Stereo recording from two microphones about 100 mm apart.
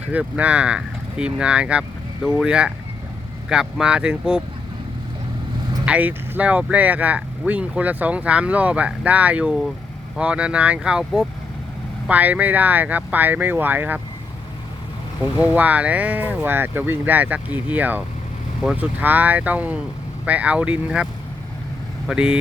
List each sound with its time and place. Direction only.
0.1 s speech: 15° right (ahead or behind)
5.8 s speech: 15° right (ahead or behind)
15.2 s speech: 15° right (ahead or behind)